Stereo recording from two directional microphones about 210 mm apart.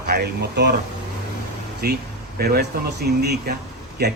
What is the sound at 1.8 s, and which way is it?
Speech, 45° right (ahead or behind).